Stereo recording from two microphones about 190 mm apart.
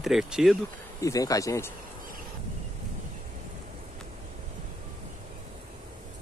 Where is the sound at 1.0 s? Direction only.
15° left (ahead or behind).